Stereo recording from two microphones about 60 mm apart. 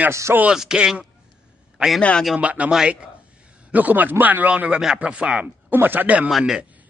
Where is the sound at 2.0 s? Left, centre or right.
Centre.